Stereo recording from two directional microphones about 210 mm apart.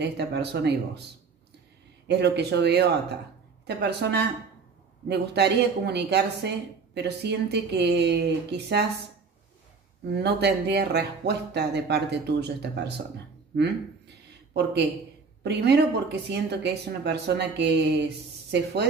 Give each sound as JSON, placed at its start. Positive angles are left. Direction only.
{"t": 0.0, "sound": "speech", "side_deg": -50}
{"t": 2.0, "sound": "speech", "side_deg": -55}
{"t": 10.2, "sound": "speech", "side_deg": -50}
{"t": 13.6, "sound": "a sound", "side_deg": -55}
{"t": 15.4, "sound": "speech", "side_deg": -50}